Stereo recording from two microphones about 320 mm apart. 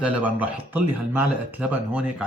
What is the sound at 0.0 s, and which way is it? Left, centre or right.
Speech, centre.